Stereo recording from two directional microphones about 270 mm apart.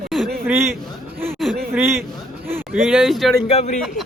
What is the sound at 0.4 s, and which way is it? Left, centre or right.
Speech, centre.